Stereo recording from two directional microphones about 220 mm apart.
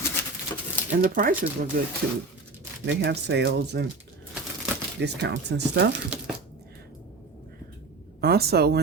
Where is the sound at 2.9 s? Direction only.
55° right (ahead or behind).